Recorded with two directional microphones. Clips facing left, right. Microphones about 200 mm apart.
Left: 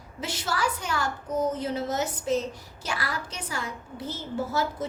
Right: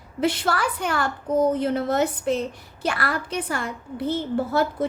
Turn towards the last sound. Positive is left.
turn(degrees=-60)  # may be behind; listen again after turning